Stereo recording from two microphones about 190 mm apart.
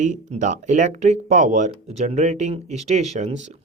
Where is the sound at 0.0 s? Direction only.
40° right (ahead or behind).